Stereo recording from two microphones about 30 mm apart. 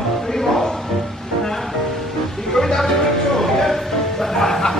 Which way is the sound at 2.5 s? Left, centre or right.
Centre.